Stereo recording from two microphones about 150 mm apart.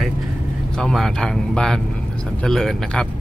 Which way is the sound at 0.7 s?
5° left (ahead or behind).